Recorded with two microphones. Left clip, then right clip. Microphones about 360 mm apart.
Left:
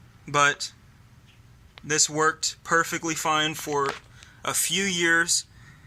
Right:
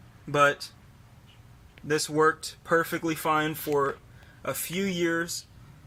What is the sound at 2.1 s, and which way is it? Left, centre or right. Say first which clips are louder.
Speech: even; centre.